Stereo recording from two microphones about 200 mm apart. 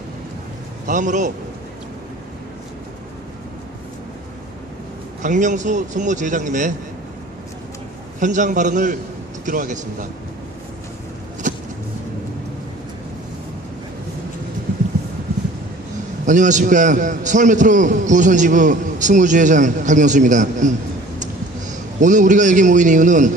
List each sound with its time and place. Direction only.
0.9 s a man's voice: 40° right (ahead or behind)
5.2 s a man's voice: 40° right (ahead or behind)
8.2 s a man's voice: 40° right (ahead or behind)
11.4 s vehicle: 40° right (ahead or behind)
16.2 s a man's voice: 40° right (ahead or behind)